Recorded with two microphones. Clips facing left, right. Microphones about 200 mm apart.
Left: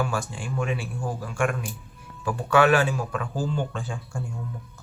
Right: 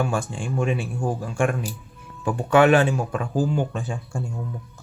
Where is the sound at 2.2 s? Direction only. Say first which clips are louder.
Right 3 dB; 20° right (ahead or behind).